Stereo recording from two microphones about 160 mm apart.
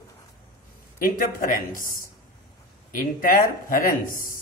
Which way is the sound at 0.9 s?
60° left (ahead or behind).